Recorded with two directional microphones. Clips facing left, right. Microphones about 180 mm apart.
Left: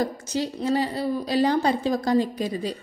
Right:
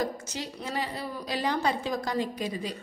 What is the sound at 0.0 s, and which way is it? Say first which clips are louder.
A woman's voice: left 6 dB; 35° left (ahead or behind).